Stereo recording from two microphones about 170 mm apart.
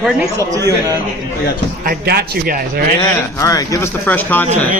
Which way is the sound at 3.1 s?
20° left (ahead or behind).